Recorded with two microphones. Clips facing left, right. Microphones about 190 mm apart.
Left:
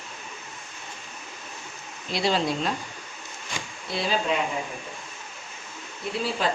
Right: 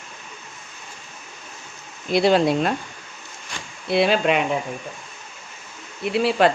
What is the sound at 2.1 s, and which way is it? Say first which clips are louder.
Speech: right 8 dB; 55° right (ahead or behind).